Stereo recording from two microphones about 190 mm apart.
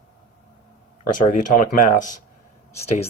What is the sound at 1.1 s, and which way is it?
Speech, 45° left (ahead or behind).